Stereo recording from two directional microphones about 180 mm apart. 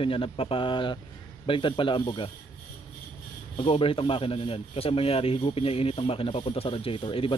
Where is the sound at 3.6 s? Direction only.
30° left (ahead or behind).